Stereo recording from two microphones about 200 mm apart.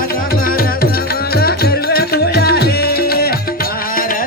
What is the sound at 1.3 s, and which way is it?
Music, 50° left (ahead or behind).